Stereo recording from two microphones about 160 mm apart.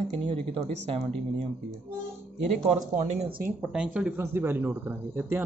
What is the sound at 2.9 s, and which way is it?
Speech, 50° right (ahead or behind).